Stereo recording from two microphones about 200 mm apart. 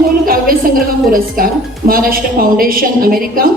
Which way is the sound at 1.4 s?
45° right (ahead or behind).